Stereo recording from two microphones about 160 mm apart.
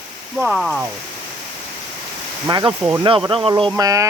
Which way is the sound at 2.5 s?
25° right (ahead or behind).